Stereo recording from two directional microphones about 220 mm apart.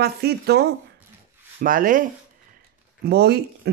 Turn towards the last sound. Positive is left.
turn(degrees=-50)  # may be behind; listen again after turning